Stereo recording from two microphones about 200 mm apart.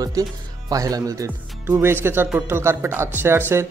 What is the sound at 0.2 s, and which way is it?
Speech, 15° right (ahead or behind).